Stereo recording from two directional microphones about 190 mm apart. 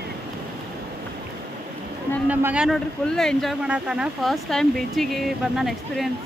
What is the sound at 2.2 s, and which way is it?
Speech, 5° right (ahead or behind).